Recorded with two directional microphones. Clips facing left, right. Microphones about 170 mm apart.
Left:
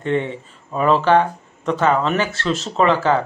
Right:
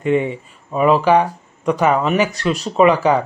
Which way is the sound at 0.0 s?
10° right (ahead or behind).